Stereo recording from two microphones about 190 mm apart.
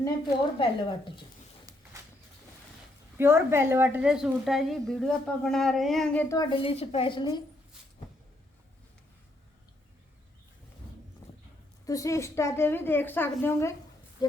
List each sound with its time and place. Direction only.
0.6 s a woman's voice: 25° left (ahead or behind)
1.7 s a sound: 20° right (ahead or behind)
3.2 s a woman's voice: 10° right (ahead or behind)
6.2 s a woman's voice: 20° left (ahead or behind)
11.9 s a woman's voice: 15° left (ahead or behind)